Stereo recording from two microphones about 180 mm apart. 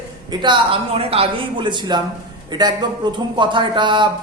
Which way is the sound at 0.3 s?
25° right (ahead or behind).